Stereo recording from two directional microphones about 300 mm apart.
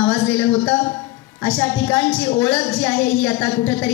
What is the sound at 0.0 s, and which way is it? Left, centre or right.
A woman's voice, centre.